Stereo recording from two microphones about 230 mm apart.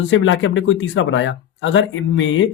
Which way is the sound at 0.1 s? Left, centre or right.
Left.